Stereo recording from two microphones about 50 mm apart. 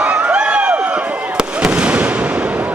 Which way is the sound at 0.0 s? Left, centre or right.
Right.